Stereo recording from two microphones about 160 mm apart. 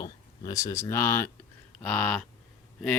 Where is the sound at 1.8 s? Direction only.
10° left (ahead or behind).